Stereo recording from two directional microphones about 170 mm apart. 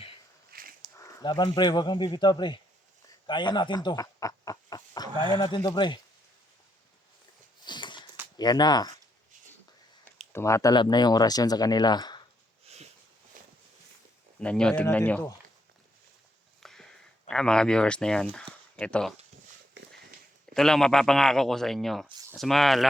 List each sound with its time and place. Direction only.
0.5 s walk: 55° right (ahead or behind)
0.9 s speech: 25° left (ahead or behind)
7.6 s a sound: 25° left (ahead or behind)
8.4 s speech: 25° left (ahead or behind)
10.3 s speech: 15° left (ahead or behind)
12.6 s sniff: 40° right (ahead or behind)
13.4 s walk: 50° right (ahead or behind)
14.3 s speech: 5° left (ahead or behind)
16.6 s sniff: centre (ahead or behind)
17.2 s speech: 5° left (ahead or behind)
20.5 s a man's voice: 5° left (ahead or behind)